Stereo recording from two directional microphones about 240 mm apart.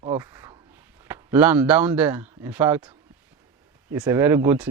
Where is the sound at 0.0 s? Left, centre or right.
Centre.